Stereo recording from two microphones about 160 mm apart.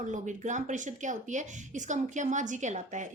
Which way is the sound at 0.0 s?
50° right (ahead or behind).